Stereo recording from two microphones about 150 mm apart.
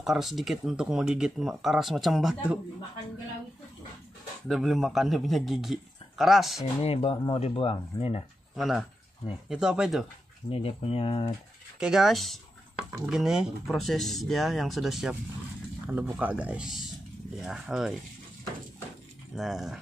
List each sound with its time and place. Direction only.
0.0 s speech: centre (ahead or behind)
4.5 s speech: centre (ahead or behind)
6.8 s speech: 40° left (ahead or behind)
8.5 s speech: centre (ahead or behind)
10.5 s speech: 40° left (ahead or behind)
11.8 s speech: centre (ahead or behind)
19.3 s speech: centre (ahead or behind)